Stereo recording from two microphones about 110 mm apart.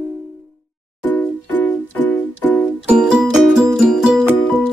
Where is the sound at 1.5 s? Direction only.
15° left (ahead or behind).